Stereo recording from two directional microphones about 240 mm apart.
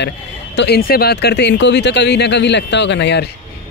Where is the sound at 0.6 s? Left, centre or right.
Left.